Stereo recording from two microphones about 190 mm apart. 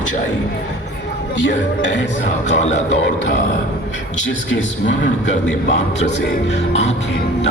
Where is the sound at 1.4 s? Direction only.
70° left (ahead or behind).